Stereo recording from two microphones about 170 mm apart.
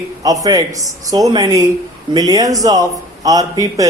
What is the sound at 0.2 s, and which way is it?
Speech, 20° right (ahead or behind).